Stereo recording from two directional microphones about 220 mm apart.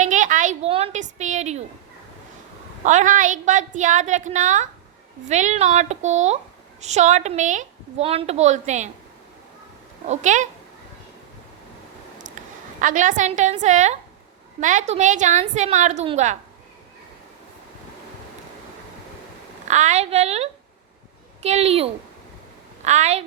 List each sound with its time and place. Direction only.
0.0 s a sound: 35° right (ahead or behind)
2.8 s a woman's voice: 35° right (ahead or behind)
10.1 s a woman's voice: 35° right (ahead or behind)
12.8 s a woman's voice: 35° right (ahead or behind)
19.6 s a woman's voice: 30° right (ahead or behind)